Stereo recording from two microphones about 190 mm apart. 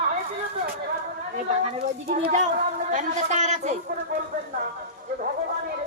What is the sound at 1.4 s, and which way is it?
Speech, 35° right (ahead or behind).